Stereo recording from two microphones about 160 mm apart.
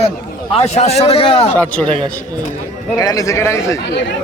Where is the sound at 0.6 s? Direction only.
40° left (ahead or behind).